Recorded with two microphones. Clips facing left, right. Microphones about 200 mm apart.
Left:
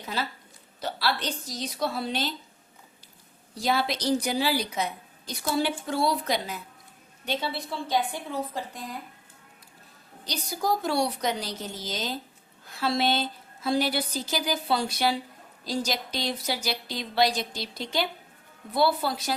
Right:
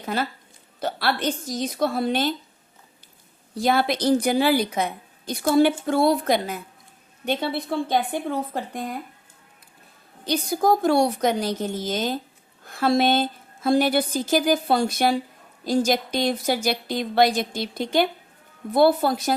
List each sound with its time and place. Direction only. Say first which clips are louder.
0.0 s a woman's voice: right 6 dB; 50° right (ahead or behind)
3.5 s a woman's voice: right 5 dB; 55° right (ahead or behind)
10.2 s a woman's voice: right 8 dB; 55° right (ahead or behind)